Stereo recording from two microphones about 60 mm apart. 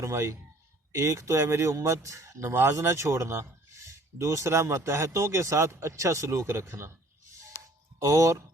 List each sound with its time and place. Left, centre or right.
0.0 s speech: right
7.9 s speech: right